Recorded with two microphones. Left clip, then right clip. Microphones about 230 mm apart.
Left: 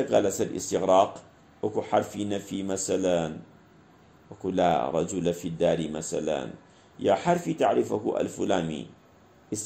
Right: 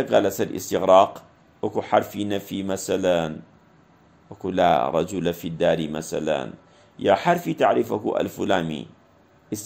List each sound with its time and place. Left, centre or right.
0.1 s speech: right
4.4 s speech: right